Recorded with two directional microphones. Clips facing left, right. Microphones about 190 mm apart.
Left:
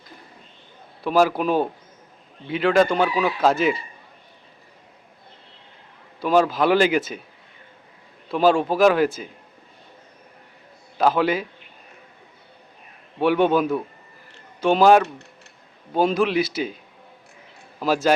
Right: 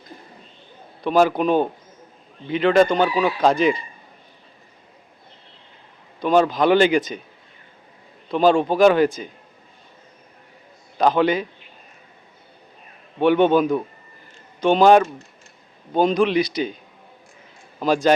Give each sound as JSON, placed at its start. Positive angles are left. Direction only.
{"t": 1.0, "sound": "a man's voice", "side_deg": 5}
{"t": 6.1, "sound": "a man's voice", "side_deg": 5}
{"t": 8.3, "sound": "a man's voice", "side_deg": 5}
{"t": 10.9, "sound": "a man's voice", "side_deg": 5}
{"t": 13.1, "sound": "a man's voice", "side_deg": 0}
{"t": 17.7, "sound": "a man's voice", "side_deg": 5}